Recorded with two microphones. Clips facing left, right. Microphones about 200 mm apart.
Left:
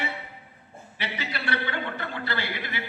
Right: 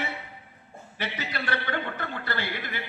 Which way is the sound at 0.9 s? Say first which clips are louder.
Right 1 dB; 45° right (ahead or behind).